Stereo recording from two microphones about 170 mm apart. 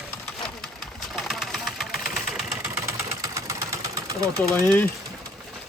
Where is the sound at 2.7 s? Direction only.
20° right (ahead or behind).